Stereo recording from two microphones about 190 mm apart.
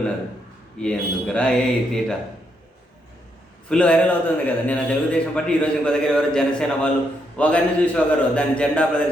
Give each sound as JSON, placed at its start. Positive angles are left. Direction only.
{"t": 0.8, "sound": "a man's voice", "side_deg": 5}
{"t": 3.7, "sound": "a man's voice", "side_deg": 5}